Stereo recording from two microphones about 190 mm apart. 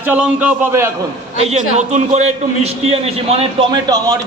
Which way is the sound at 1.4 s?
35° right (ahead or behind).